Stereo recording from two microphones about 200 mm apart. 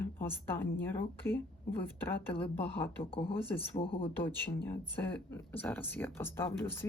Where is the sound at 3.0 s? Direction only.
25° left (ahead or behind).